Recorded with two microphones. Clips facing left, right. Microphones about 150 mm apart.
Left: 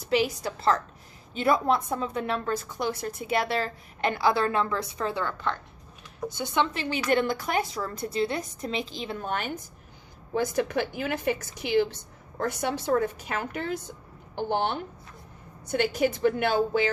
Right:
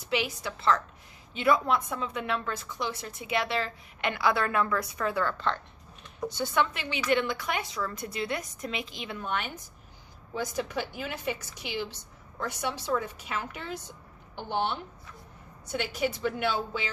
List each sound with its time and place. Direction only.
0.0 s a woman's voice: 40° left (ahead or behind)
6.3 s a woman's voice: 15° left (ahead or behind)
6.7 s a woman's voice: 40° left (ahead or behind)
10.3 s a woman's voice: 55° left (ahead or behind)